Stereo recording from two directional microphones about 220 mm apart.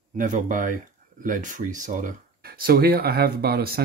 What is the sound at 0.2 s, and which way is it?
Speech, 35° right (ahead or behind).